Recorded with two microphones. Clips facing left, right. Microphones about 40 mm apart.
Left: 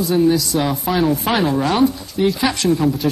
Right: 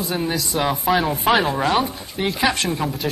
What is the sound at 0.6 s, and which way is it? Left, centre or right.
Speech, centre.